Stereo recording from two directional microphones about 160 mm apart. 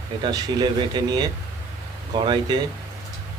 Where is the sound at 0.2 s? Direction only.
30° right (ahead or behind).